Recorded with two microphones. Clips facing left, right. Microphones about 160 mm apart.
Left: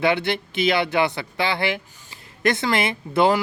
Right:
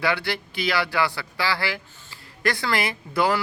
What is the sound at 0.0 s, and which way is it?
Speech, 20° left (ahead or behind).